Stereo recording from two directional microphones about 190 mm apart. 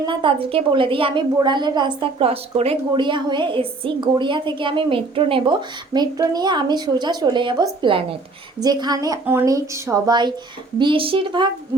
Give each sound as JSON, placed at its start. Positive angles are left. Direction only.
{"t": 0.0, "sound": "a woman's voice", "side_deg": -25}